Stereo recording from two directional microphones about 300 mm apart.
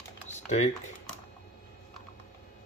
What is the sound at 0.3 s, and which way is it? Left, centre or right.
Typing, left.